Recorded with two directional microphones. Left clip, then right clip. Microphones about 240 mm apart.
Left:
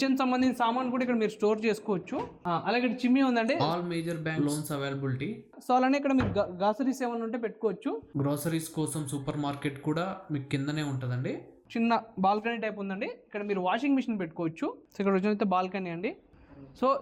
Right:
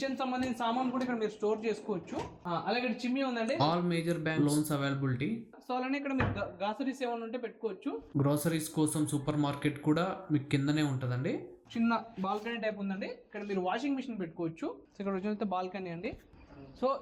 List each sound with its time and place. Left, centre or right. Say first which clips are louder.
0.0 s a man's voice: left 7 dB; left
2.4 s a man's voice: left 4 dB; left
3.6 s a man's voice: left 1 dB; centre
5.6 s a man's voice: left 9 dB; left
8.1 s a man's voice: right 2 dB; centre
11.7 s a man's voice: left 5 dB; left